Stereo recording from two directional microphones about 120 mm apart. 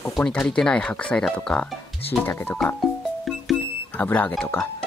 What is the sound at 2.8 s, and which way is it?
Music, centre (ahead or behind).